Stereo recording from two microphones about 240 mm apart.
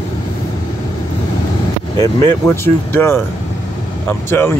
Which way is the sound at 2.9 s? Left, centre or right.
Centre.